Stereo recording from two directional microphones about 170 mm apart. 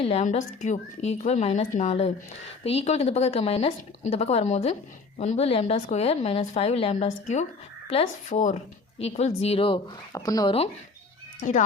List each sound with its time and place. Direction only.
0.0 s speech: 40° left (ahead or behind); by 10.5 s 20° left (ahead or behind)
11.4 s speech: 50° left (ahead or behind)